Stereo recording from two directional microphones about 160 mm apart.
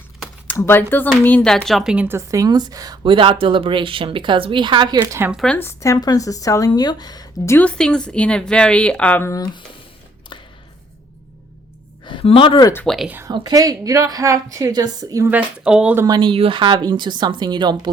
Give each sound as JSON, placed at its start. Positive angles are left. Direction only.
{"t": 0.5, "sound": "a woman's voice", "side_deg": 15}
{"t": 4.9, "sound": "speech", "side_deg": -15}
{"t": 5.3, "sound": "speech", "side_deg": 0}
{"t": 5.5, "sound": "speech", "side_deg": 15}
{"t": 12.0, "sound": "speech", "side_deg": 35}
{"t": 12.7, "sound": "speech", "side_deg": 5}
{"t": 13.1, "sound": "a woman's voice", "side_deg": -15}
{"t": 15.3, "sound": "speech", "side_deg": -5}
{"t": 16.0, "sound": "a woman's voice", "side_deg": -30}